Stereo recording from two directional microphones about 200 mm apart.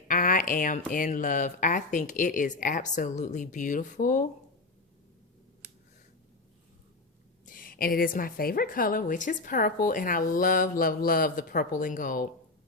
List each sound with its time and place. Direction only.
0.1 s a sound: 45° left (ahead or behind)
0.9 s speech: 40° left (ahead or behind)
7.4 s a woman's voice: 45° left (ahead or behind)